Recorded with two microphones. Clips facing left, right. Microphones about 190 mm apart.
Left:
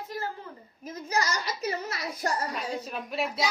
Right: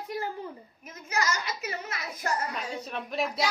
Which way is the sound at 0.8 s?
35° left (ahead or behind).